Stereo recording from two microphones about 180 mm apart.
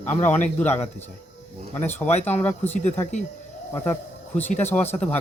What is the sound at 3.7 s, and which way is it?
Speech, 15° left (ahead or behind).